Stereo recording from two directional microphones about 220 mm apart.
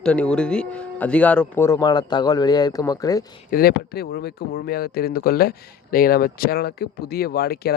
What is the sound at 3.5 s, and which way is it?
Speech, 45° left (ahead or behind).